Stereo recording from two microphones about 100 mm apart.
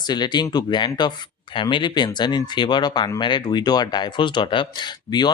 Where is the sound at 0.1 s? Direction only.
45° left (ahead or behind).